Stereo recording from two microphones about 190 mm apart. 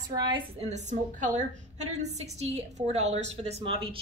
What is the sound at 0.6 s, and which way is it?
A woman's voice, 35° right (ahead or behind).